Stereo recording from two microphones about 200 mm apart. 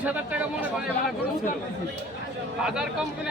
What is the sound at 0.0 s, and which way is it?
Speech, 5° right (ahead or behind).